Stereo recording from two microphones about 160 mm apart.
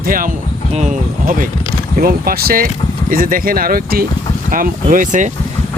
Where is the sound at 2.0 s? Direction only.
65° right (ahead or behind); by 5.3 s 50° right (ahead or behind).